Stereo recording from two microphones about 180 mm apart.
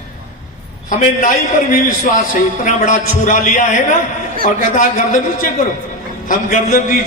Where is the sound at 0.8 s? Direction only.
45° left (ahead or behind).